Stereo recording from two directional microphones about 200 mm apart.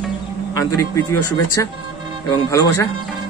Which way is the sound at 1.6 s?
15° left (ahead or behind).